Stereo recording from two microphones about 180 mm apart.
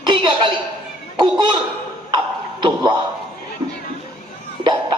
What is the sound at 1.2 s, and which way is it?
Laughter, 25° right (ahead or behind).